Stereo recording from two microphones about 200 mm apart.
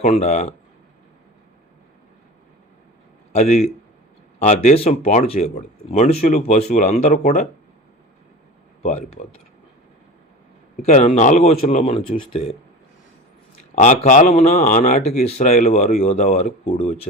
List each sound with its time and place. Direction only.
0.0 s speech: 35° left (ahead or behind)
3.3 s speech: 35° left (ahead or behind)
8.8 s speech: 35° left (ahead or behind)
10.8 s speech: 35° left (ahead or behind)
13.7 s speech: 35° left (ahead or behind)